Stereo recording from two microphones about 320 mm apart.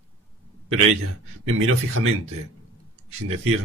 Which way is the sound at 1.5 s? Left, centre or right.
Right.